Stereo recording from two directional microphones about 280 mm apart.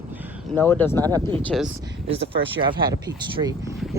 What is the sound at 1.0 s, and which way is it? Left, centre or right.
Speech, centre.